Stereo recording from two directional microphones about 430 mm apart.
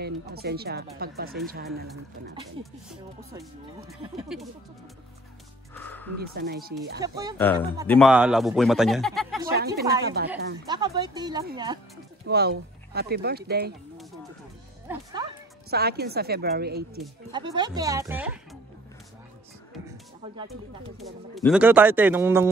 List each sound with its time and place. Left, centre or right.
0.0 s speech: right
2.6 s speech: centre
4.3 s speech: centre
5.8 s music: centre
6.3 s speech: right
7.0 s speech: centre
7.3 s speech: centre
10.0 s speech: right
10.7 s speech: centre
12.3 s speech: right
14.9 s music: centre
15.7 s speech: right
17.3 s speech: centre
21.0 s speech: centre